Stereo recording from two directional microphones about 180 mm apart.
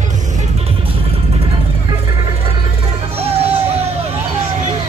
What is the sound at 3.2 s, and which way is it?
Music, 35° right (ahead or behind).